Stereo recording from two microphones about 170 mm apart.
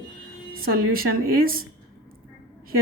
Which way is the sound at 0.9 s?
60° right (ahead or behind).